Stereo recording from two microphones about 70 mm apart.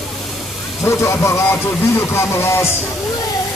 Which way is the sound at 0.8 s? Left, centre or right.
Left.